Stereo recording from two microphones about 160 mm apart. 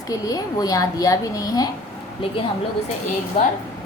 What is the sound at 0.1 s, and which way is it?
Speech, 25° left (ahead or behind).